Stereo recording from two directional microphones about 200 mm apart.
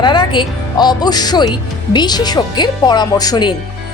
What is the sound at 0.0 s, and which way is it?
Speech, 20° left (ahead or behind).